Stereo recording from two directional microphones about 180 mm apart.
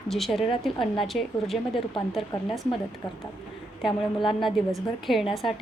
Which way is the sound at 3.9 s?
25° left (ahead or behind).